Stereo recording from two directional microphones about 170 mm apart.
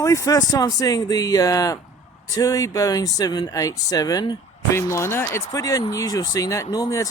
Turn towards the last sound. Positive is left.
turn(degrees=20)  # may be behind; listen again after turning